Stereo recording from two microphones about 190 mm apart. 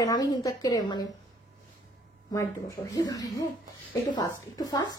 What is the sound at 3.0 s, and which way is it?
A woman's voice, 20° left (ahead or behind).